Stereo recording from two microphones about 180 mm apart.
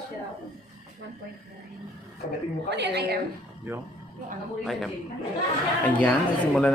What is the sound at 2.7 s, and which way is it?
Speech, 70° right (ahead or behind).